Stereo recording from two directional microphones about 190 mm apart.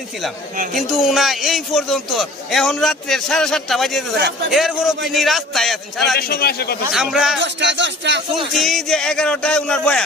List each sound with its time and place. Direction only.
0.7 s a man's voice: centre (ahead or behind)
6.1 s a man's voice: 55° left (ahead or behind)
6.9 s a man's voice: centre (ahead or behind)
7.3 s speech: 70° right (ahead or behind)
8.5 s a man's voice: centre (ahead or behind)